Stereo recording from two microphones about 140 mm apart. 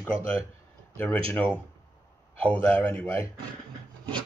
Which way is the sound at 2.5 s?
15° left (ahead or behind).